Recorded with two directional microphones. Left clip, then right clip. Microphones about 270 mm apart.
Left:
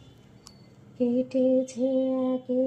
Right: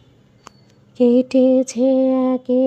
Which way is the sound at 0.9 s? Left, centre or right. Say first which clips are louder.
Right 11 dB; right.